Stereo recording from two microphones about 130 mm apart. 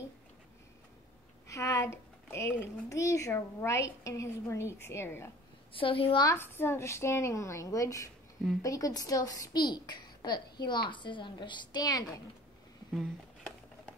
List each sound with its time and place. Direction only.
1.5 s speech: 25° left (ahead or behind)
5.7 s a woman's voice: 45° left (ahead or behind)
6.2 s a woman's voice: 15° left (ahead or behind)